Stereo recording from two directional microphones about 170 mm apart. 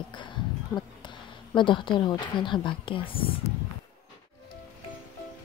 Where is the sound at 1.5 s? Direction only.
30° left (ahead or behind).